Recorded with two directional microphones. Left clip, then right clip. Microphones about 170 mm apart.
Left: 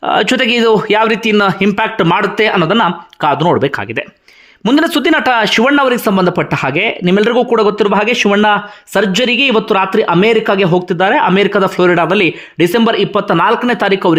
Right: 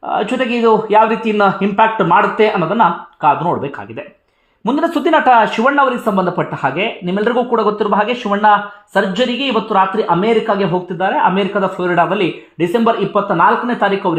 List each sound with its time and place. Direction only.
0.0 s speech: 35° left (ahead or behind)